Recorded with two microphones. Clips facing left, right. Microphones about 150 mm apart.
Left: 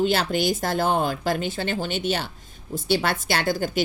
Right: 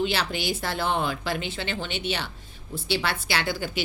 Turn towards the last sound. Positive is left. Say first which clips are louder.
# left 4 dB
turn(degrees=45)  # may be behind; listen again after turning